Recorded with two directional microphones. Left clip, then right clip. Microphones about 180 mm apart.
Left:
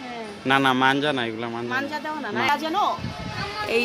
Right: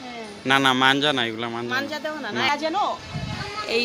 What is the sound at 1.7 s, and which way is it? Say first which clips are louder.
A woman's voice: left 1 dB; 35° right (ahead or behind).